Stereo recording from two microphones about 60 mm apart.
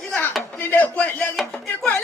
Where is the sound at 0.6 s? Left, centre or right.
Left.